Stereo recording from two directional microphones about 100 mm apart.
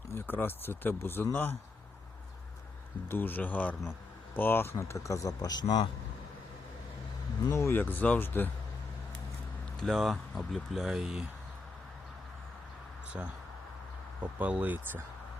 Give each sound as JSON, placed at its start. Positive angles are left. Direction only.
{"t": 0.1, "sound": "speech", "side_deg": 20}
{"t": 3.1, "sound": "speech", "side_deg": 20}
{"t": 7.5, "sound": "speech", "side_deg": 25}
{"t": 9.8, "sound": "speech", "side_deg": 0}
{"t": 14.2, "sound": "speech", "side_deg": -15}